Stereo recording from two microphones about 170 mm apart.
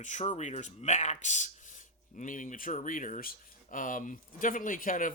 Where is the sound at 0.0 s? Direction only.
45° left (ahead or behind).